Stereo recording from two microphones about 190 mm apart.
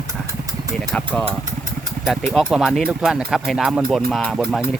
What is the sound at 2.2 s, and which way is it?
Speech, centre (ahead or behind).